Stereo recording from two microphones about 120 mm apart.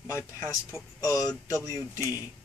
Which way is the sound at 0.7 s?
20° right (ahead or behind).